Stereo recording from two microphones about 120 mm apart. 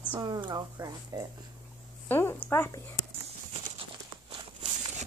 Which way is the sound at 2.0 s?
20° left (ahead or behind).